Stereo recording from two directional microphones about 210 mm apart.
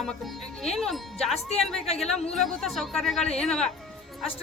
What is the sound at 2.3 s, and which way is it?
A woman's voice, centre (ahead or behind).